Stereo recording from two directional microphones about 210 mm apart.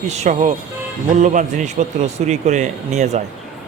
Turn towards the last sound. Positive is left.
turn(degrees=-35)  # may be behind; listen again after turning